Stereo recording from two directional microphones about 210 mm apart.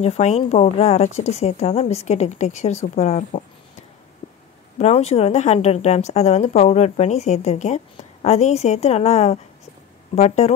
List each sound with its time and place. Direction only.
0.0 s speech: 30° left (ahead or behind)
4.7 s speech: 30° left (ahead or behind)